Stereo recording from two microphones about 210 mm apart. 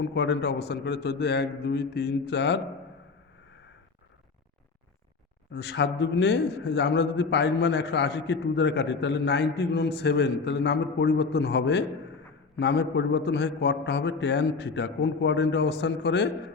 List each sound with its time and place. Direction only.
0.0 s a man's voice: 60° left (ahead or behind)
5.5 s a man's voice: 55° left (ahead or behind)